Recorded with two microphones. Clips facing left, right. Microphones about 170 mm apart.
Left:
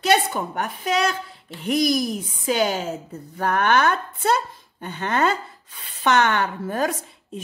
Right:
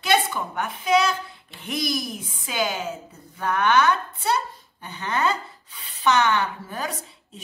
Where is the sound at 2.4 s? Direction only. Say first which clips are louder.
Left 5 dB; 45° left (ahead or behind).